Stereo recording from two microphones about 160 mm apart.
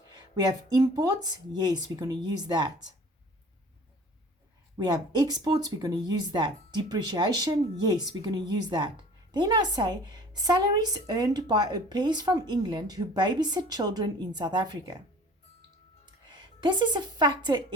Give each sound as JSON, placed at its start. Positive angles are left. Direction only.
{"t": 0.8, "sound": "a woman's voice", "side_deg": -25}
{"t": 4.8, "sound": "a woman's voice", "side_deg": -25}
{"t": 16.3, "sound": "a woman's voice", "side_deg": -30}